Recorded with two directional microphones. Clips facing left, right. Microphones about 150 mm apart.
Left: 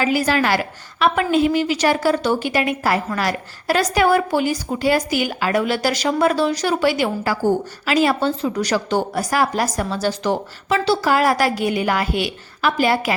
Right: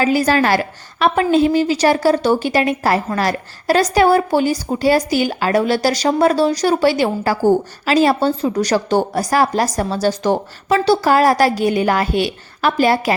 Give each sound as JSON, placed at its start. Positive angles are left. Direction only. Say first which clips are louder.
{"t": 0.0, "sound": "a woman's voice", "louder": "right 3 dB", "side_deg": -40}